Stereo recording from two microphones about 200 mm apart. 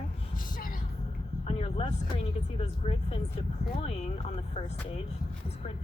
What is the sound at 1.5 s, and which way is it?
A woman's voice, 30° left (ahead or behind).